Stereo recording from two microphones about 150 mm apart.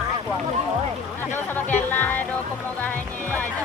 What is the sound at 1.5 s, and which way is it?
Music, 10° left (ahead or behind).